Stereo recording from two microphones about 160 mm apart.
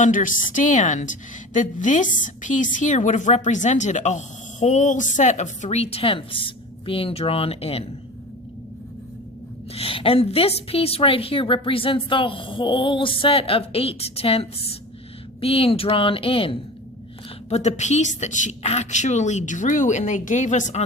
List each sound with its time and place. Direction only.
0.0 s a woman's voice: 55° left (ahead or behind); by 7.9 s 40° left (ahead or behind)
9.7 s a woman's voice: 35° left (ahead or behind)